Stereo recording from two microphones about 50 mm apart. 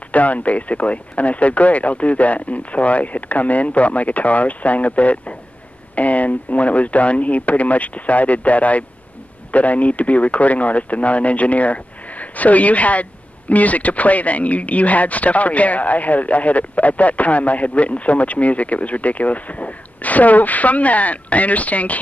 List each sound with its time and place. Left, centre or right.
0.1 s speech: left